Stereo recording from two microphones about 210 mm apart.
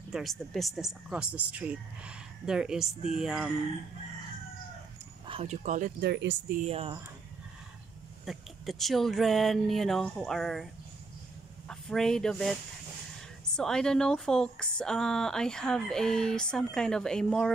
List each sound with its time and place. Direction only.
0.1 s speech: centre (ahead or behind)
5.2 s speech: 30° right (ahead or behind); by 6.3 s 55° right (ahead or behind)
6.6 s speech: 30° right (ahead or behind)
8.3 s speech: centre (ahead or behind)
13.6 s speech: 5° left (ahead or behind)